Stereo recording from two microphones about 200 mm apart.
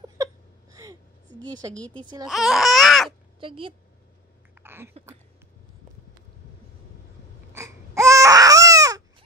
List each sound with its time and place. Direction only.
0.0 s whimper: 15° right (ahead or behind)
2.2 s baby cry: centre (ahead or behind)
3.1 s crow: 25° right (ahead or behind)
4.6 s a sound: 10° right (ahead or behind)
7.5 s baby cry: 15° right (ahead or behind)